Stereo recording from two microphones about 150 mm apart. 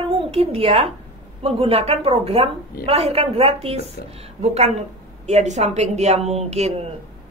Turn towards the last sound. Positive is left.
turn(degrees=-45)  # may be behind; listen again after turning